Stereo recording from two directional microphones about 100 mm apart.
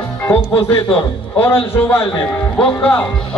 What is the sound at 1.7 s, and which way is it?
Speech, 25° left (ahead or behind).